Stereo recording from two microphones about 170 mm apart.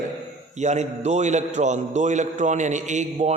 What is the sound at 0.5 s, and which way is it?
A man's voice, 40° right (ahead or behind).